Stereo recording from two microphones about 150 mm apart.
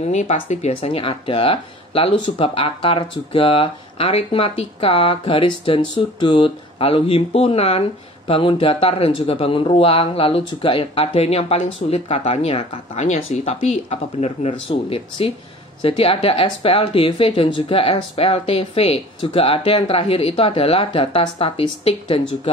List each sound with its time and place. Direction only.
0.0 s speech: 50° left (ahead or behind)
13.0 s speech: 50° left (ahead or behind)
14.5 s speech: 35° left (ahead or behind)